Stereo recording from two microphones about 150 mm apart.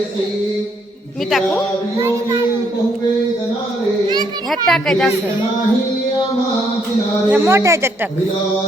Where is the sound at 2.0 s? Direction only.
20° right (ahead or behind).